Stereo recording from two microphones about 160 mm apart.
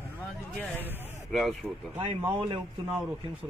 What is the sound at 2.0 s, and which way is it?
Speech, 30° right (ahead or behind).